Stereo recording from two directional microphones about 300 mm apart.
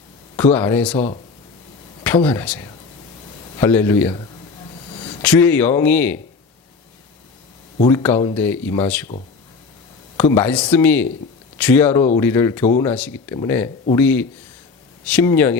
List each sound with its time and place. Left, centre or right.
0.3 s speech: centre
0.9 s speech: centre
2.0 s speech: centre
7.9 s speech: centre
10.2 s speech: centre